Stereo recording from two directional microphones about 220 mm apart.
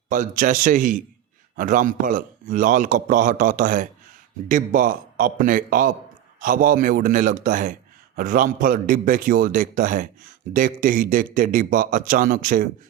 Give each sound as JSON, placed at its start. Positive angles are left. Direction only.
{"t": 0.1, "sound": "a man's voice", "side_deg": -35}